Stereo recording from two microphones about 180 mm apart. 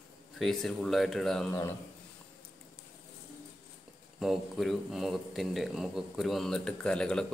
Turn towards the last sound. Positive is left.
turn(degrees=5)  # may be behind; listen again after turning